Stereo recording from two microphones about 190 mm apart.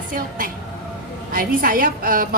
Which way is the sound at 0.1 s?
45° right (ahead or behind).